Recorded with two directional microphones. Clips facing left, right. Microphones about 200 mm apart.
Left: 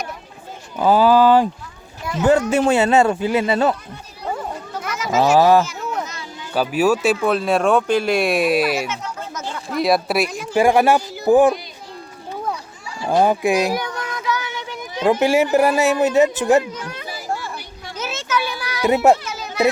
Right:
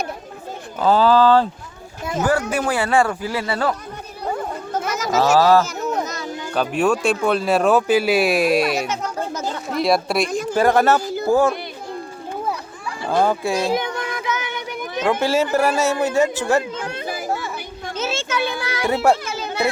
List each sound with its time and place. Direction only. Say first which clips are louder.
0.8 s speech: left 1 dB; 15° left (ahead or behind)
5.1 s speech: left 1 dB; 15° left (ahead or behind)
5.6 s a sound: right 3 dB; 40° right (ahead or behind)
6.5 s speech: left 2 dB; 5° left (ahead or behind)
9.3 s a sound: right 3 dB; 35° right (ahead or behind)
9.7 s speech: left 1 dB; centre (ahead or behind); by 11.5 s 15° left (ahead or behind)
13.1 s speech: left 3 dB; 15° left (ahead or behind)
13.7 s child singing: right 2 dB; 20° right (ahead or behind)
15.0 s speech: left 3 dB; 15° left (ahead or behind)
17.9 s children playing: even; 25° right (ahead or behind)
18.9 s speech: left 3 dB; 20° left (ahead or behind)